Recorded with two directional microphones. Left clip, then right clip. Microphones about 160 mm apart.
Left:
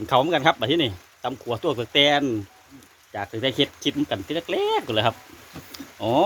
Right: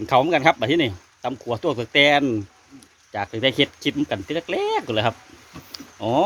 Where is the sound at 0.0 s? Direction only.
20° right (ahead or behind).